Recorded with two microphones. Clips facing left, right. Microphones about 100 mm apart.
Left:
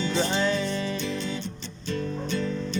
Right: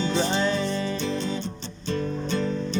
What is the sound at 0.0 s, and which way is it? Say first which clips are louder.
Music: right 1 dB; 35° right (ahead or behind).